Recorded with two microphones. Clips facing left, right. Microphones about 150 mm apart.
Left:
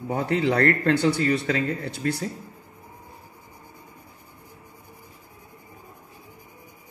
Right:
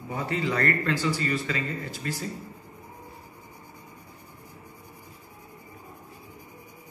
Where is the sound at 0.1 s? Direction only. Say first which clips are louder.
Left 6 dB; 70° left (ahead or behind).